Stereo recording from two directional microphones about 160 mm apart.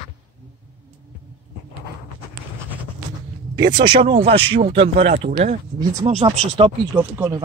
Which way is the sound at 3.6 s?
30° right (ahead or behind).